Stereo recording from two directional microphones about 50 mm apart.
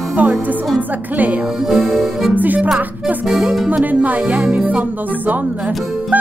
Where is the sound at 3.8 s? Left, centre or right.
Right.